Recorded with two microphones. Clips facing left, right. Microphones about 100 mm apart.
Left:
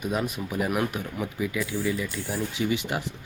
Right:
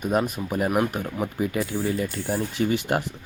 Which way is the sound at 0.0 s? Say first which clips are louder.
Right 4 dB; 45° right (ahead or behind).